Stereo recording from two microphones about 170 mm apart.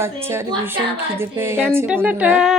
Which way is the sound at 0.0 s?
15° right (ahead or behind).